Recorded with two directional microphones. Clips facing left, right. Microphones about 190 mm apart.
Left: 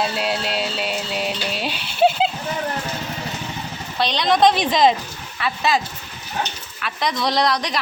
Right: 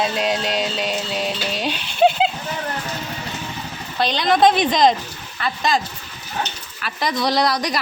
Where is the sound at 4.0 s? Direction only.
Centre (ahead or behind).